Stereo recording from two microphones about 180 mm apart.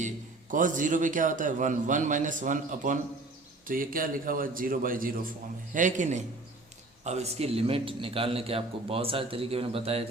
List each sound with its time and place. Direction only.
0.5 s a man's voice: 45° right (ahead or behind)